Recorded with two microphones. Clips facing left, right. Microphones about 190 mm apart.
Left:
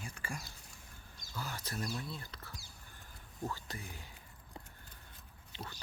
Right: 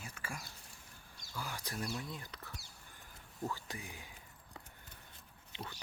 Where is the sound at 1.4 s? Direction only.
15° right (ahead or behind).